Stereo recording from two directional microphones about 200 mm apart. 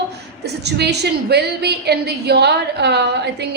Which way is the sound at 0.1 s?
55° right (ahead or behind).